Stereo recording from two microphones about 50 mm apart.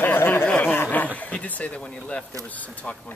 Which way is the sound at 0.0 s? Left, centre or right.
Left.